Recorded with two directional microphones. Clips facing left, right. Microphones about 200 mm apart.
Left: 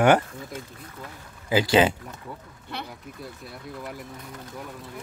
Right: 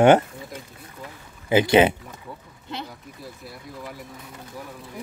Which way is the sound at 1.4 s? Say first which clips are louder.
Right 3 dB; 20° right (ahead or behind).